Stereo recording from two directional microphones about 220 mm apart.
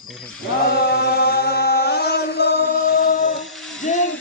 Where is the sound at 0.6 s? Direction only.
45° left (ahead or behind).